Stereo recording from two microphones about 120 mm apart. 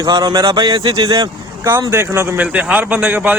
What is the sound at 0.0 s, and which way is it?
Speech, 35° right (ahead or behind).